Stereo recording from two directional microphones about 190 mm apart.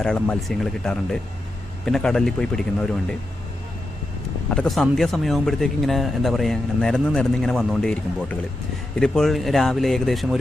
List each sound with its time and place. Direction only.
0.0 s speech: 5° left (ahead or behind)
4.5 s speech: 5° left (ahead or behind)